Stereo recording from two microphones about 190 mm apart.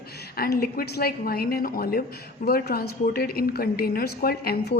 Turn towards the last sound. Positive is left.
turn(degrees=55)  # may be behind; listen again after turning